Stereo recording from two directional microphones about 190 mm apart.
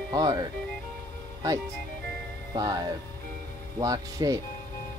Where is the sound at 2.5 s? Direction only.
20° right (ahead or behind).